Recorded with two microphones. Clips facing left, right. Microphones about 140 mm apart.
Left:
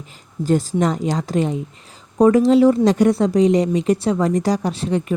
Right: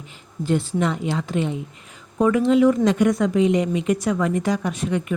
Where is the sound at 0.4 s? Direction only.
40° left (ahead or behind).